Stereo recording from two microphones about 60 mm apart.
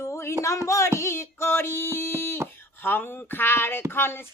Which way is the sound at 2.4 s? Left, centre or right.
Right.